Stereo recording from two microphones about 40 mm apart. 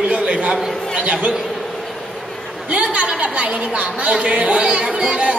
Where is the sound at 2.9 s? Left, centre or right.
Right.